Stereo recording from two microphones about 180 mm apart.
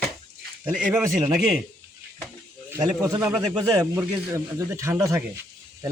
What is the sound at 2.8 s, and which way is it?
Speech, 20° right (ahead or behind).